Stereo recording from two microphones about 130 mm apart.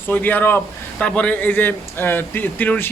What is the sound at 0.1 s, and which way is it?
A man's voice, 15° left (ahead or behind).